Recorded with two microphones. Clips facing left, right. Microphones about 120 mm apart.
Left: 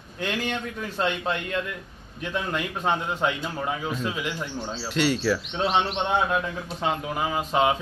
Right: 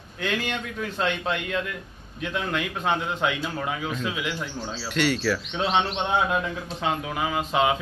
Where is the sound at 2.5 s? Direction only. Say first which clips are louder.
Even; 5° left (ahead or behind).